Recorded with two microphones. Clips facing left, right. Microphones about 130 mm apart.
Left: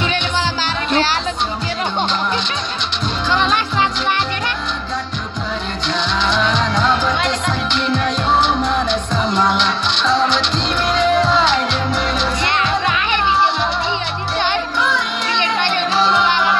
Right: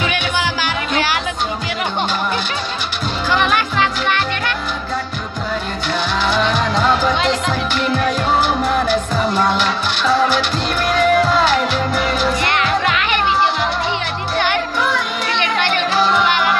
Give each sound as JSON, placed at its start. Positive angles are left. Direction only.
{"t": 6.3, "sound": "music", "side_deg": -5}
{"t": 12.4, "sound": "music", "side_deg": 20}
{"t": 16.0, "sound": "music", "side_deg": 0}